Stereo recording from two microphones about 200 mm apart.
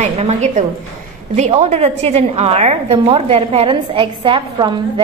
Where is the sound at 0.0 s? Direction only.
35° right (ahead or behind).